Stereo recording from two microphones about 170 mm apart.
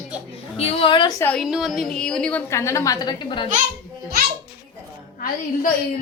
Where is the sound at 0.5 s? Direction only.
35° left (ahead or behind).